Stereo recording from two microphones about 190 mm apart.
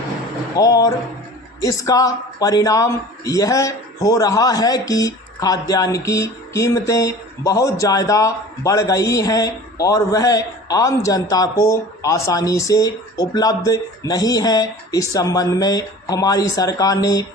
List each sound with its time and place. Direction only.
0.5 s a man's voice: 20° left (ahead or behind)